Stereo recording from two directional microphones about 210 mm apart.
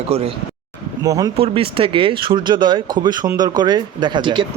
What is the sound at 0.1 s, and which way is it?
Speech, 30° right (ahead or behind).